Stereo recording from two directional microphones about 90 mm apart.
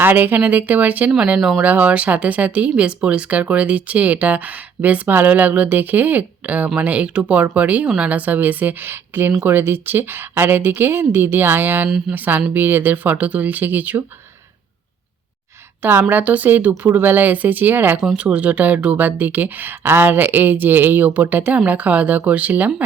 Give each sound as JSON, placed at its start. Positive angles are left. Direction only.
{"t": 0.0, "sound": "a woman's voice", "side_deg": -20}
{"t": 1.4, "sound": "speech", "side_deg": -5}
{"t": 1.6, "sound": "a woman's voice", "side_deg": -20}
{"t": 15.8, "sound": "a woman's voice", "side_deg": -25}